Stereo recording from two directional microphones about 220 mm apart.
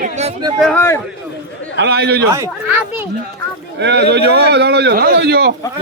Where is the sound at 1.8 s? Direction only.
50° right (ahead or behind).